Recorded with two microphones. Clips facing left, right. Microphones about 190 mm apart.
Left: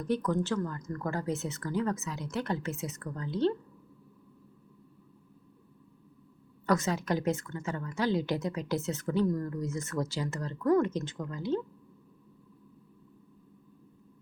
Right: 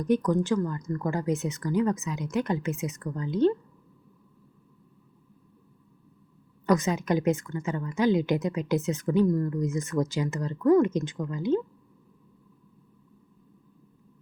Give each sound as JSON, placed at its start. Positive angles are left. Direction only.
{"t": 0.0, "sound": "speech", "side_deg": -15}
{"t": 6.7, "sound": "speech", "side_deg": -15}